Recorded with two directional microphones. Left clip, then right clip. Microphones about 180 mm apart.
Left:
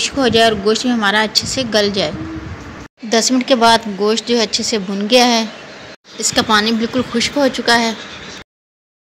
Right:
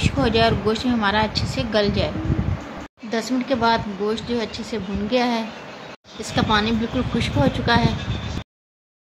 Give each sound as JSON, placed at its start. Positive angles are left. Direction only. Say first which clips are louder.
{"t": 0.0, "sound": "speech", "louder": "left 6 dB", "side_deg": 15}